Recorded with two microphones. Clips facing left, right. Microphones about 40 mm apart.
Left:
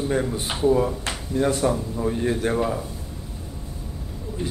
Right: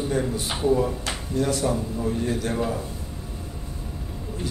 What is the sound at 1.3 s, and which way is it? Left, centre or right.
A man's voice, left.